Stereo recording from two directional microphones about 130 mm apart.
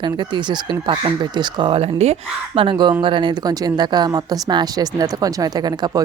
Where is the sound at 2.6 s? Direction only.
40° right (ahead or behind).